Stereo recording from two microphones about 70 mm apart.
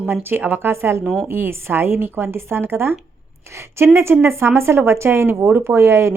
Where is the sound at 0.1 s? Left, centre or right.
Right.